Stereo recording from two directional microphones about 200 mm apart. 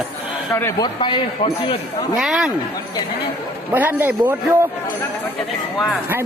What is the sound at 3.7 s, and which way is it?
Speech, 10° right (ahead or behind).